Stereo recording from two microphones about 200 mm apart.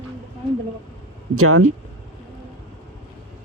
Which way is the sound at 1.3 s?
90° right.